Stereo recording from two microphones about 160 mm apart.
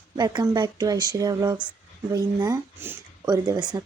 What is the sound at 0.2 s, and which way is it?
Speech, 25° right (ahead or behind).